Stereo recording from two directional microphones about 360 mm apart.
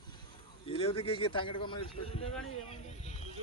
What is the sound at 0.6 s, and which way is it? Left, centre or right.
Speech, centre.